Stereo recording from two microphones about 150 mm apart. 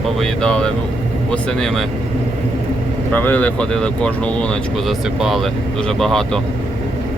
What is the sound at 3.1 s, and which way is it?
Speech, 10° left (ahead or behind).